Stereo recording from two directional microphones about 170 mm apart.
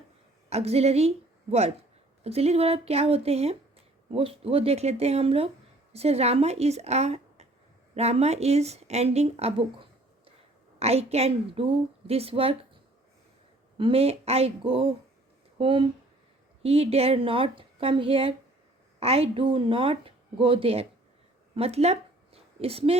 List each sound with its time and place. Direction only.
0.5 s a woman's voice: 40° right (ahead or behind)
10.8 s speech: 35° right (ahead or behind)
13.7 s speech: 30° right (ahead or behind)
21.5 s a sound: 35° right (ahead or behind)